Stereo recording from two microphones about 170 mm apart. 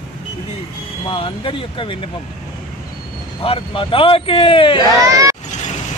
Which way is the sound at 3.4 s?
30° left (ahead or behind).